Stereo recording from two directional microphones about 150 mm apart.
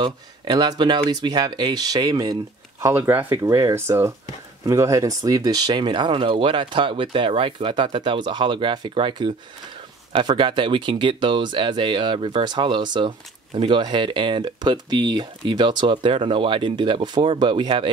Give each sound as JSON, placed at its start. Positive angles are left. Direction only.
{"t": 0.0, "sound": "speech", "side_deg": -30}
{"t": 2.8, "sound": "speech", "side_deg": -15}